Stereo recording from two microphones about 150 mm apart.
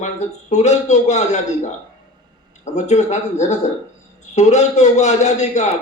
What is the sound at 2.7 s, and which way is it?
Speech, 50° left (ahead or behind).